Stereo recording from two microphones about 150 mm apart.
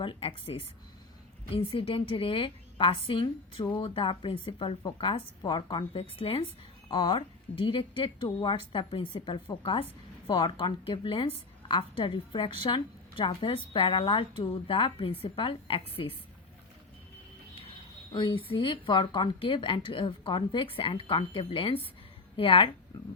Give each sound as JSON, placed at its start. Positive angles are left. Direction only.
{"t": 0.0, "sound": "a woman's voice", "side_deg": 35}
{"t": 18.1, "sound": "a woman's voice", "side_deg": 30}